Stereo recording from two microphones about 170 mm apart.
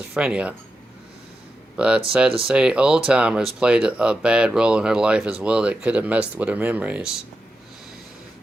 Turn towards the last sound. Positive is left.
turn(degrees=-5)  # may be behind; listen again after turning